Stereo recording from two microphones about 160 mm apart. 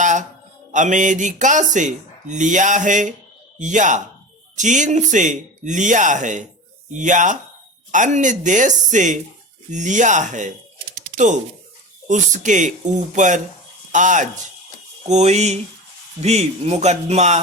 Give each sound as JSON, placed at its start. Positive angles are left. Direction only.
{"t": 0.0, "sound": "music", "side_deg": -50}
{"t": 0.7, "sound": "speech", "side_deg": -50}
{"t": 12.0, "sound": "speech", "side_deg": -50}